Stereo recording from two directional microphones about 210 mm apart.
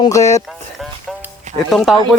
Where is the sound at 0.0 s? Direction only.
15° left (ahead or behind).